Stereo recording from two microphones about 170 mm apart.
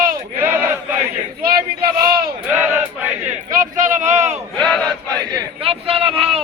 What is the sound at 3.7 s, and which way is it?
Speech, 50° right (ahead or behind).